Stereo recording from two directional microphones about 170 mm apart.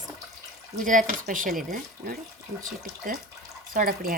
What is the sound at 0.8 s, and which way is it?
A woman's voice, 50° right (ahead or behind).